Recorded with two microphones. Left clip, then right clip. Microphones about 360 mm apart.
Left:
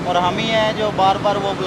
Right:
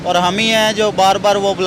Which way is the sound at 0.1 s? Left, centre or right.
Right.